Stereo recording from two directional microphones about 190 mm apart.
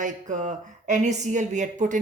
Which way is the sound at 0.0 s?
40° right (ahead or behind).